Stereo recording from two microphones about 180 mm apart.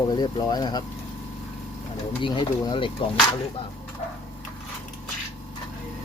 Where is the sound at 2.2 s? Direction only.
25° left (ahead or behind).